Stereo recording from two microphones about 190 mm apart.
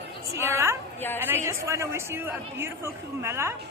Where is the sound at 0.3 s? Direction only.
15° right (ahead or behind).